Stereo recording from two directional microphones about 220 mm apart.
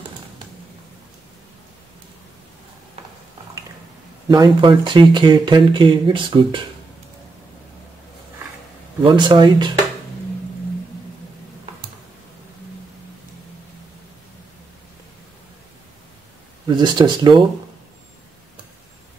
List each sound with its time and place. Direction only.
4.3 s speech: 20° right (ahead or behind)
9.0 s speech: 20° right (ahead or behind)
16.6 s speech: 20° right (ahead or behind)